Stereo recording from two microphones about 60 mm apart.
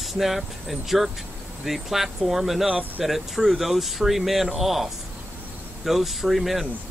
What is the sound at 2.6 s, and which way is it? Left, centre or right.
Speech, right.